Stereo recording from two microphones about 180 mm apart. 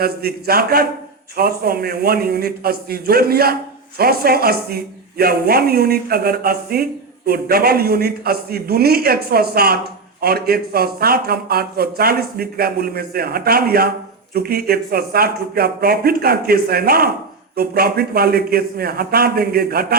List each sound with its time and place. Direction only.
0.0 s a man's voice: 60° right (ahead or behind)